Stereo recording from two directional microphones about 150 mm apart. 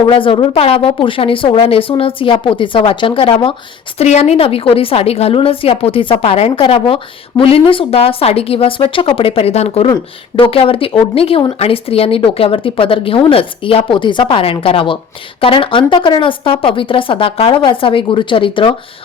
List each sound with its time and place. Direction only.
0.1 s a woman's voice: 35° left (ahead or behind)